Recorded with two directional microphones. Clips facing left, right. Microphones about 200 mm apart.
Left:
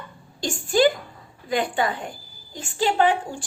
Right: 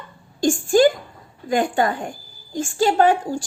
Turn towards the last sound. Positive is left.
turn(degrees=-40)  # may be behind; listen again after turning